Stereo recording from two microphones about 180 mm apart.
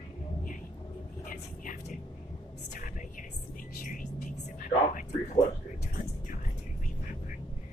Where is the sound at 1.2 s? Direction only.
45° left (ahead or behind).